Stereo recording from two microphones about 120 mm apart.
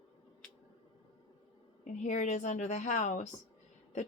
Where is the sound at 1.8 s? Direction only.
85° left.